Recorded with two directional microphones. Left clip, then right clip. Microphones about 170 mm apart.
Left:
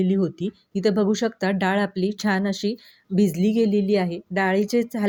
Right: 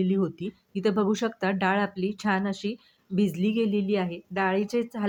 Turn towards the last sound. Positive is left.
turn(degrees=25)  # may be behind; listen again after turning